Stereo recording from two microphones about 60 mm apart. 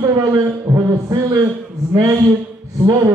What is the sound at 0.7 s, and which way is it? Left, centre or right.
Speech, right.